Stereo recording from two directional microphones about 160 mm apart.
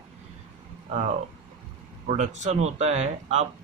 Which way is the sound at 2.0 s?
50° right (ahead or behind).